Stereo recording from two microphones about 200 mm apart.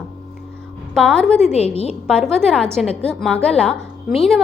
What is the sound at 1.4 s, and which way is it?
Speech, 30° left (ahead or behind).